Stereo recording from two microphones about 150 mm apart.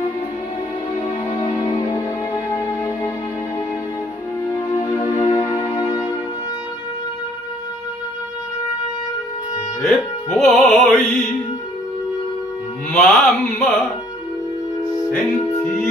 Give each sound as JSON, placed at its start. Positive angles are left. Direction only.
{"t": 1.6, "sound": "music", "side_deg": 30}
{"t": 9.8, "sound": "music", "side_deg": 0}
{"t": 12.9, "sound": "mantra", "side_deg": 5}
{"t": 15.6, "sound": "music", "side_deg": 5}